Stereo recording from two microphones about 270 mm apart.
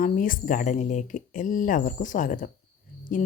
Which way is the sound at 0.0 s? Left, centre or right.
Left.